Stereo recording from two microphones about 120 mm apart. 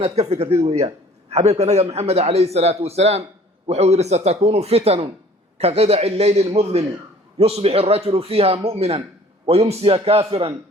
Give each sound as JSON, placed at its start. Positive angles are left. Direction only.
{"t": 0.0, "sound": "a man's voice", "side_deg": -60}